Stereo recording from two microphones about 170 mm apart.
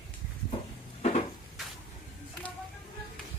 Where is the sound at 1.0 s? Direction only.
40° left (ahead or behind).